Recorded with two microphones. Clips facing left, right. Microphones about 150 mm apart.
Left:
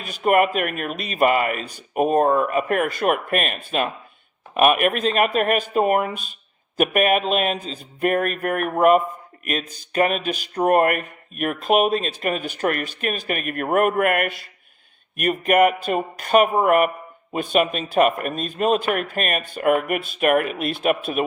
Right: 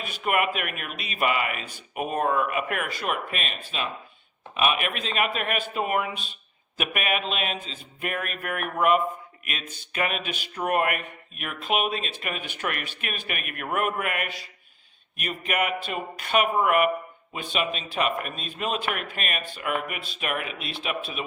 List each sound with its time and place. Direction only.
0.0 s speech: 40° left (ahead or behind)